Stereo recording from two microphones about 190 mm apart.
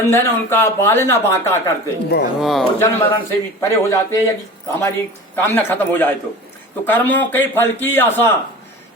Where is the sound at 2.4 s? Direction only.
Centre (ahead or behind).